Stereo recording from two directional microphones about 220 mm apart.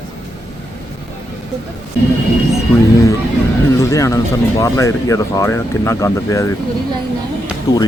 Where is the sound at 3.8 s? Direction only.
15° left (ahead or behind).